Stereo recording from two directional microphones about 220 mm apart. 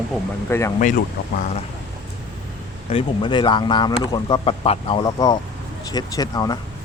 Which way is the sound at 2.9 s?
25° left (ahead or behind).